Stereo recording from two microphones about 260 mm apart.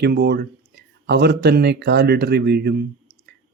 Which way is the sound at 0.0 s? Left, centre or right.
Right.